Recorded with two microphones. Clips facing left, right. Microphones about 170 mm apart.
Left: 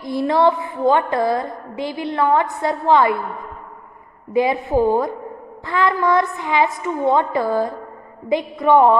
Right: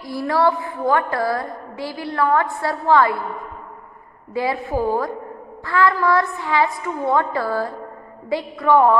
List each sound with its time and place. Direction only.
0.0 s a woman's voice: 20° left (ahead or behind)
4.3 s a woman's voice: 20° left (ahead or behind)